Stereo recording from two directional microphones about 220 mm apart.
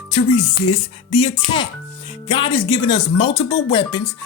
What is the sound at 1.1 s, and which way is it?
Speech, 25° left (ahead or behind).